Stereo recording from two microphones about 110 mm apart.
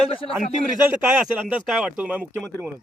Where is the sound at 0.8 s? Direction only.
20° right (ahead or behind).